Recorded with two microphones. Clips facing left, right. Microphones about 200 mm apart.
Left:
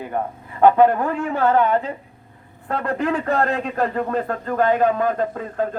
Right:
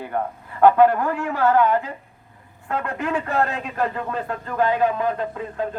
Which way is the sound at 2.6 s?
35° left (ahead or behind).